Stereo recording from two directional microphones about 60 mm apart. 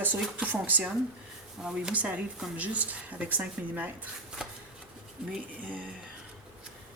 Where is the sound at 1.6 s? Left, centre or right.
Centre.